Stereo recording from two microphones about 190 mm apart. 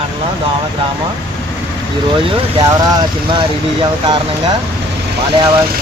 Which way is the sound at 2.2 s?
30° right (ahead or behind).